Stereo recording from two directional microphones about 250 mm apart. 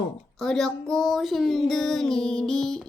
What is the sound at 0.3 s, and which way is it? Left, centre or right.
Speech, centre.